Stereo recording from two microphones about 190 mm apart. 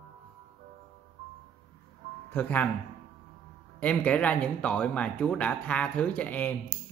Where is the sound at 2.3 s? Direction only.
10° left (ahead or behind).